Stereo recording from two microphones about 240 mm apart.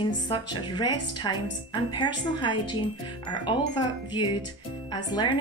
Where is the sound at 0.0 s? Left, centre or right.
Centre.